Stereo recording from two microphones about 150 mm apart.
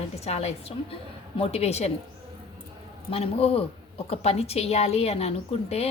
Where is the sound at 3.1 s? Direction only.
40° left (ahead or behind).